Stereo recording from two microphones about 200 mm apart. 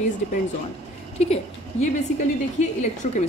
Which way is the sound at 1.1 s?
30° left (ahead or behind).